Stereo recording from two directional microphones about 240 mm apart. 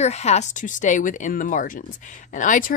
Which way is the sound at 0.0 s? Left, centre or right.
Left.